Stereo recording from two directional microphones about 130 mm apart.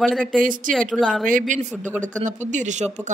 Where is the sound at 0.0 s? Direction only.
Centre (ahead or behind).